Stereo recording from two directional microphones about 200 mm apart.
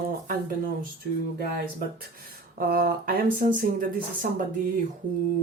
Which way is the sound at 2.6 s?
50° right (ahead or behind).